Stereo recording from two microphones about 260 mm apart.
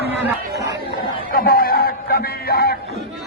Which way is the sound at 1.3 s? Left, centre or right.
Left.